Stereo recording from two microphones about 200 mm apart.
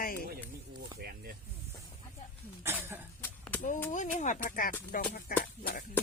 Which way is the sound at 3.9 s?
40° left (ahead or behind).